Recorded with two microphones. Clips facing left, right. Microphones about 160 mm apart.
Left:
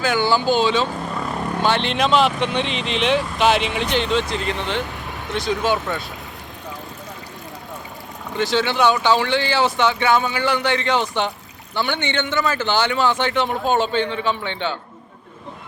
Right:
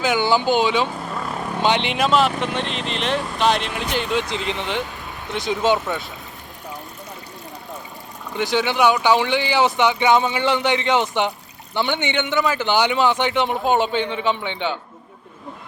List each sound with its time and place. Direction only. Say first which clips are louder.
0.0 s speech: even; 15° right (ahead or behind)
1.2 s vehicle: left 2 dB; centre (ahead or behind)
1.6 s speech: right 1 dB; 15° right (ahead or behind)
2.0 s speech: left 3 dB; centre (ahead or behind); by 6.1 s 20° right (ahead or behind)
8.4 s speech: even; 15° right (ahead or behind)